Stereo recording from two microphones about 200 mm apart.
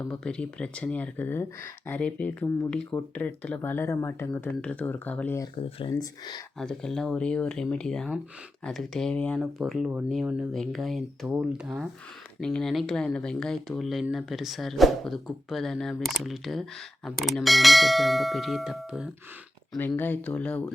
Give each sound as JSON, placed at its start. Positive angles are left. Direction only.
{"t": 0.0, "sound": "speech", "side_deg": 5}
{"t": 5.8, "sound": "speech", "side_deg": 20}
{"t": 6.6, "sound": "speech", "side_deg": 5}
{"t": 19.9, "sound": "speech", "side_deg": 10}